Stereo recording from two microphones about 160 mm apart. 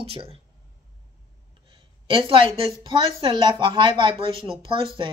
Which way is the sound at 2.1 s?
35° right (ahead or behind).